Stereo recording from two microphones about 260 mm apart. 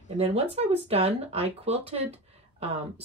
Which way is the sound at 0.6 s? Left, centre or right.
Right.